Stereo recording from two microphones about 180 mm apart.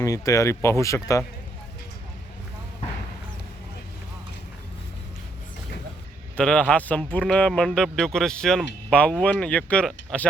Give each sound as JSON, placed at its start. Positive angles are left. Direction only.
{"t": 0.0, "sound": "speech", "side_deg": 20}
{"t": 6.3, "sound": "speech", "side_deg": 5}